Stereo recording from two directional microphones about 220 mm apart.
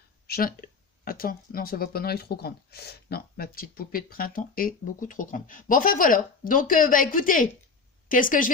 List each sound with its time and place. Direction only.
0.3 s speech: 40° left (ahead or behind)